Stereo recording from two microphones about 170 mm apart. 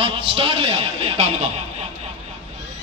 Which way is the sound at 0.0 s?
30° right (ahead or behind).